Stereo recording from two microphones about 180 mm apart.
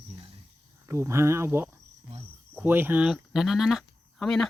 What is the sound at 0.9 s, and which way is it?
Cricket, 15° right (ahead or behind).